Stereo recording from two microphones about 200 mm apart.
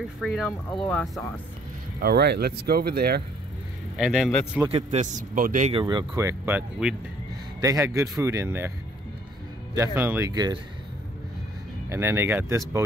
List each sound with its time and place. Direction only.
0.2 s speech: centre (ahead or behind)
2.0 s speech: 50° right (ahead or behind)
3.9 s speech: 5° right (ahead or behind)
4.6 s a man's voice: 30° right (ahead or behind)
5.7 s speech: 25° right (ahead or behind)
9.9 s speech: 10° right (ahead or behind)
11.9 s speech: 15° right (ahead or behind)